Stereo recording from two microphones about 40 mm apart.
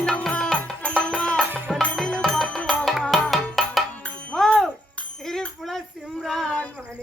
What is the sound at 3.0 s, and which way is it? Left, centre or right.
Music, centre.